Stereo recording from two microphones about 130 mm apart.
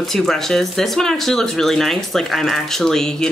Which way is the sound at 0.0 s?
Centre (ahead or behind).